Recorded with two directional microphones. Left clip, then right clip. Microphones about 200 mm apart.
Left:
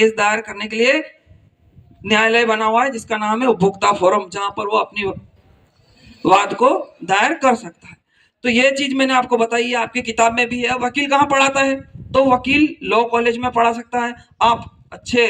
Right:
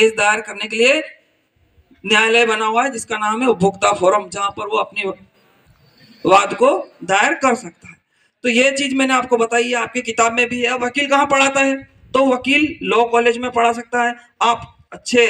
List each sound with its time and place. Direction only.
0.2 s a man's voice: 40° left (ahead or behind)
2.0 s a man's voice: 40° left (ahead or behind)
6.2 s a man's voice: 40° left (ahead or behind)